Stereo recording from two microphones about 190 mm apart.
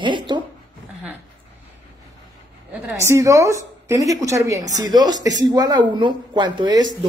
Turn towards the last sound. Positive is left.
turn(degrees=-20)  # may be behind; listen again after turning